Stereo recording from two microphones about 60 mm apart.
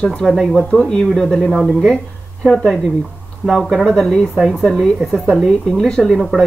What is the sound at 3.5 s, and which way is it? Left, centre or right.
Speech, centre.